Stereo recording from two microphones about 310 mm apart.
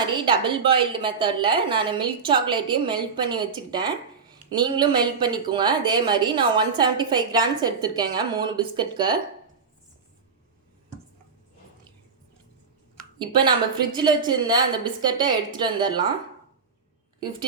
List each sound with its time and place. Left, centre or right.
0.0 s a woman's voice: centre
13.1 s a woman's voice: centre